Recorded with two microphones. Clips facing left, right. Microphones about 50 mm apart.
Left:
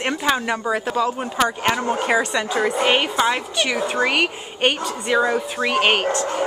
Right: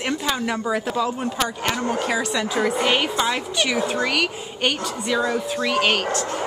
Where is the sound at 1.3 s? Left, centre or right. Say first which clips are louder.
Left 4 dB; left.